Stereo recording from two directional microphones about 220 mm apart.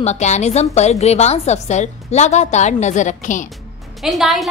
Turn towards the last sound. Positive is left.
turn(degrees=0)  # may be behind; listen again after turning